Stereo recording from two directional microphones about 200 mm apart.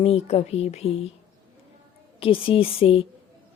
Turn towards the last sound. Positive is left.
turn(degrees=30)  # may be behind; listen again after turning